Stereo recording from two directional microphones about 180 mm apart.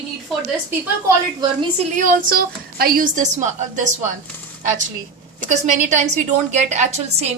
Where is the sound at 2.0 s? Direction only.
55° right (ahead or behind).